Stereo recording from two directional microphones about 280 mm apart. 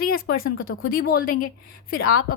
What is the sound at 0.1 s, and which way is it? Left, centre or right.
A woman's voice, left.